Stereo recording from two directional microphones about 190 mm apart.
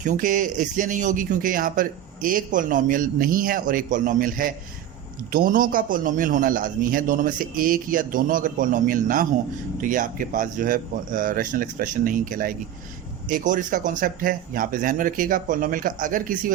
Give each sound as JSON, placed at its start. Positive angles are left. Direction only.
{"t": 0.0, "sound": "speech", "side_deg": -40}